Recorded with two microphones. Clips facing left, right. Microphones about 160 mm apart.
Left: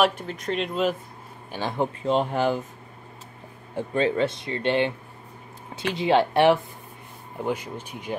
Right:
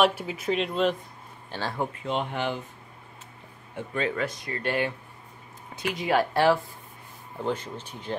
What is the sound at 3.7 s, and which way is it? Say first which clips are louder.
Speech: left 6 dB; 30° left (ahead or behind).